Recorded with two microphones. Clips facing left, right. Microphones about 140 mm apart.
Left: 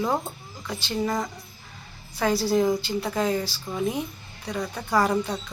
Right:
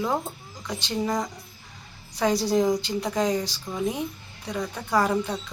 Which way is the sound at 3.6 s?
5° left (ahead or behind).